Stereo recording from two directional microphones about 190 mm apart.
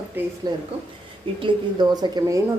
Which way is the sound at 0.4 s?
20° right (ahead or behind).